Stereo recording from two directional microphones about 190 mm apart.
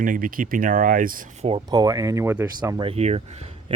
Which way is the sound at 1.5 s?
25° right (ahead or behind).